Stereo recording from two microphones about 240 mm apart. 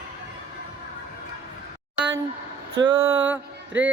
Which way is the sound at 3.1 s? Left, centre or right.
Right.